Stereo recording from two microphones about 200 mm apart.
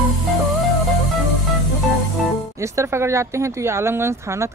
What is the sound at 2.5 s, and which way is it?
Speech, 15° right (ahead or behind).